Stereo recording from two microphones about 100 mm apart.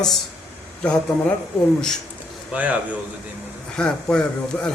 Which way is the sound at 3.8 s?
10° left (ahead or behind).